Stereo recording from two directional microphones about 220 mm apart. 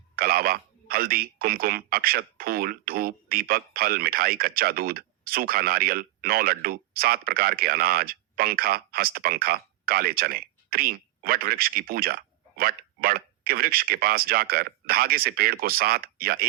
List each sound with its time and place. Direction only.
0.2 s speech: 40° right (ahead or behind)